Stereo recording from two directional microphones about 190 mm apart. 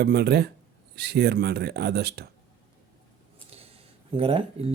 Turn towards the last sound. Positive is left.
turn(degrees=-30)  # may be behind; listen again after turning